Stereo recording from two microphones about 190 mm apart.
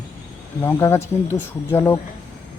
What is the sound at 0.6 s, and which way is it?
Speech, 15° left (ahead or behind).